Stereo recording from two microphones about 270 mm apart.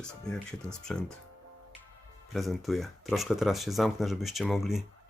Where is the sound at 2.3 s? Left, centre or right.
Centre.